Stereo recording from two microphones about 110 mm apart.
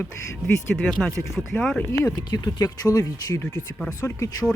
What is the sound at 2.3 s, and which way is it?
Speech, 40° left (ahead or behind).